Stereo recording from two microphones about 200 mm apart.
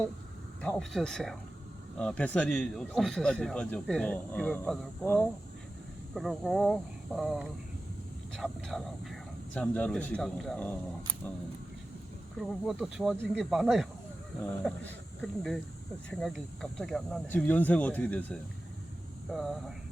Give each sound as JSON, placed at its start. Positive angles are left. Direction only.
{"t": 0.6, "sound": "speech", "side_deg": 5}
{"t": 12.4, "sound": "speech", "side_deg": 0}